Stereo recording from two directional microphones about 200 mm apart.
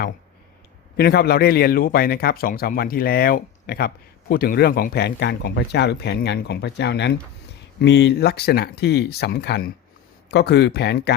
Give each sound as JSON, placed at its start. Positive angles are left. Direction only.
{"t": 0.9, "sound": "speech", "side_deg": 50}